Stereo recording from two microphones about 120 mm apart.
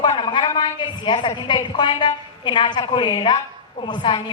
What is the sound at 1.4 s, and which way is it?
A woman's voice, 40° left (ahead or behind).